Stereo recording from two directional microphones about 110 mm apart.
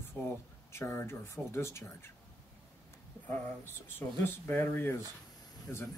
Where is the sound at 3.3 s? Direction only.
15° left (ahead or behind).